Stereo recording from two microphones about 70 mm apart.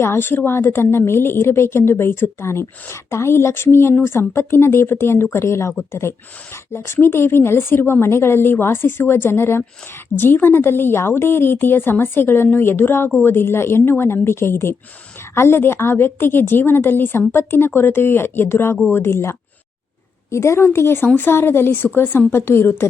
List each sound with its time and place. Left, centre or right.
0.0 s a woman's voice: left